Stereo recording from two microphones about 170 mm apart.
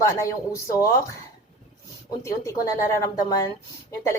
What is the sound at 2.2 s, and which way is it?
Speech, 15° left (ahead or behind).